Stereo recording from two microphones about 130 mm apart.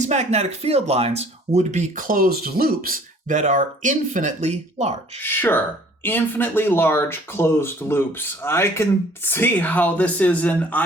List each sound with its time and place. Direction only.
0.0 s speech: 60° right (ahead or behind)
5.2 s speech: 15° left (ahead or behind)